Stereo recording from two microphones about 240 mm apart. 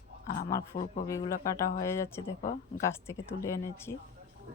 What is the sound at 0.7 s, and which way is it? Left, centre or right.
Speech, left.